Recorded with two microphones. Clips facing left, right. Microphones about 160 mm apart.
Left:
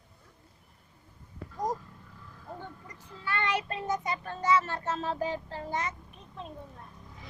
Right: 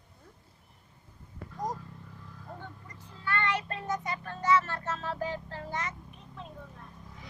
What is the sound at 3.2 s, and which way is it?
Child singing, 15° left (ahead or behind).